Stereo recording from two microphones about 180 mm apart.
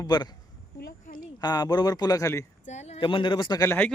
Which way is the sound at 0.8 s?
50° left (ahead or behind).